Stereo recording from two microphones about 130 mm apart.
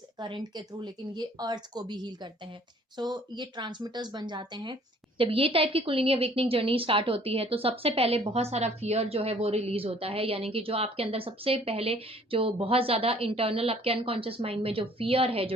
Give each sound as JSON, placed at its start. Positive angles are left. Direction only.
{"t": 0.2, "sound": "speech", "side_deg": -35}